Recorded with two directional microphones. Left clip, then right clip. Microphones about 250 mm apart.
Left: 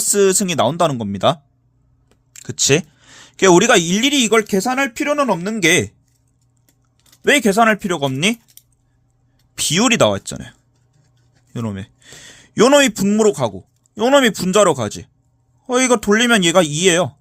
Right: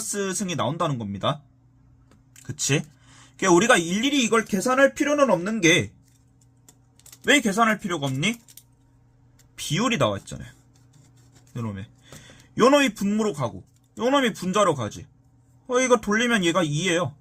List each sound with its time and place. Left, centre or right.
0.1 s speech: left
7.3 s speech: left
9.6 s speech: left
11.5 s a man's voice: left